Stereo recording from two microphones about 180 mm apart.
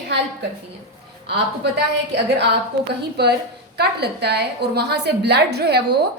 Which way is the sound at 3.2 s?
65° right (ahead or behind).